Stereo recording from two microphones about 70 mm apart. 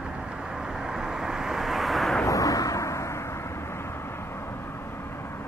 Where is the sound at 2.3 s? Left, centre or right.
Left.